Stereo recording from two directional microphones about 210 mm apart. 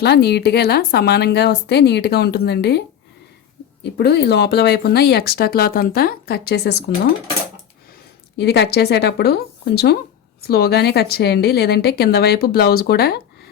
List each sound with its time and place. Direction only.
0.0 s speech: 50° left (ahead or behind)
3.9 s speech: 50° left (ahead or behind)
8.4 s speech: 50° left (ahead or behind)